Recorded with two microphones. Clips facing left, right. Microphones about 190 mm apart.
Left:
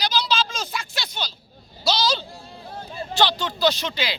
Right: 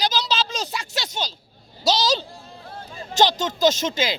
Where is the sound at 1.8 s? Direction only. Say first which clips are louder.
Right 2 dB; 40° right (ahead or behind).